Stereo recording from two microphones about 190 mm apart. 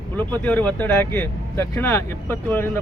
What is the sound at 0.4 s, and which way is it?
Speech, 10° left (ahead or behind).